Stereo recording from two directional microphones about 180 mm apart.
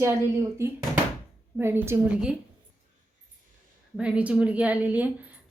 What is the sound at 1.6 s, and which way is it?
Speech, 15° right (ahead or behind).